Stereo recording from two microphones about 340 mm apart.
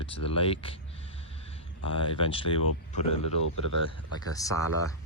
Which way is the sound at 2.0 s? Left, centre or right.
Centre.